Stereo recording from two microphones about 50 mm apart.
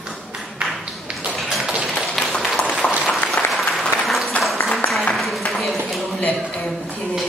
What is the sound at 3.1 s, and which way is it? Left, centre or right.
Applause, centre.